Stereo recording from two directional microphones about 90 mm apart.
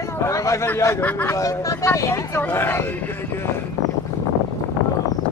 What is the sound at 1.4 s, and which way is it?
Speech, 35° left (ahead or behind).